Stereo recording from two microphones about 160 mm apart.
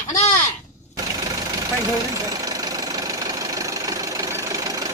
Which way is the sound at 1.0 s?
25° right (ahead or behind).